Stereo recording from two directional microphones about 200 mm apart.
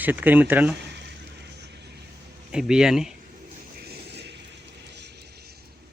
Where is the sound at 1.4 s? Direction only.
55° right (ahead or behind).